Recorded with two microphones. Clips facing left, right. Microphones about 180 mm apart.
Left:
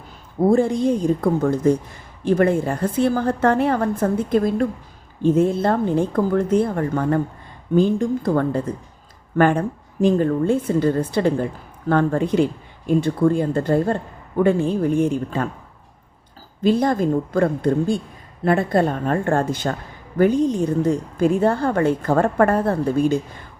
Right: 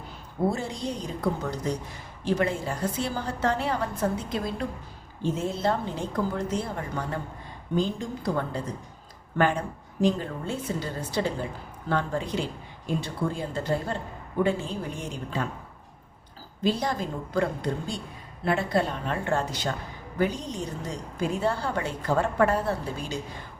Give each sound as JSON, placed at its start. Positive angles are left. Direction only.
{"t": 0.5, "sound": "a woman's voice", "side_deg": 55}
{"t": 16.6, "sound": "a woman's voice", "side_deg": 55}